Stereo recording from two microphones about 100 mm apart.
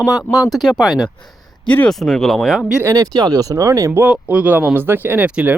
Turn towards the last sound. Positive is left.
turn(degrees=-10)  # may be behind; listen again after turning